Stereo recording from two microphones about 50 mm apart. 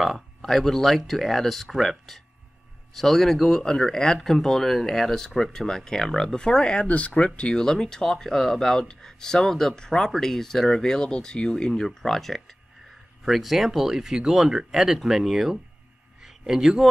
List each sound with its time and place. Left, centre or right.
0.4 s speech: centre
6.9 s speech: left
7.3 s speech: centre